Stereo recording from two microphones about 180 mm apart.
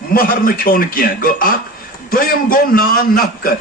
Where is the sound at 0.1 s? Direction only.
55° left (ahead or behind).